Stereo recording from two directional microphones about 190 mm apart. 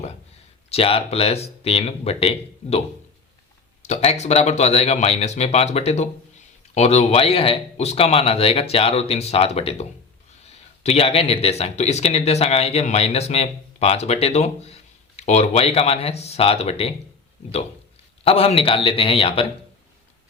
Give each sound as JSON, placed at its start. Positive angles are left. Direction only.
{"t": 0.7, "sound": "speech", "side_deg": 30}
{"t": 3.8, "sound": "speech", "side_deg": 35}
{"t": 18.3, "sound": "speech", "side_deg": 30}